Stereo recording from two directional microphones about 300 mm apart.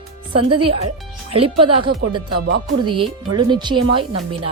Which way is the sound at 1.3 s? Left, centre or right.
Centre.